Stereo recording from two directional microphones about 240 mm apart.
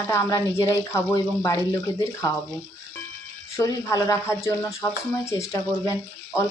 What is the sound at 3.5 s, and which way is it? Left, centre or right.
Speech, centre.